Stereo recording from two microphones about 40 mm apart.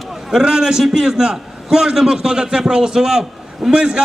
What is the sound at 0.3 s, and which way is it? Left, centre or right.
A man's voice, centre.